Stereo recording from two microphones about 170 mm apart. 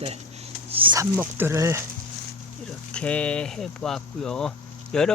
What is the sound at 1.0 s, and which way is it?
Speech, 15° right (ahead or behind).